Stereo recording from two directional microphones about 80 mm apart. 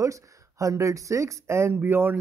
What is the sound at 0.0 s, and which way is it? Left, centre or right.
Speech, right.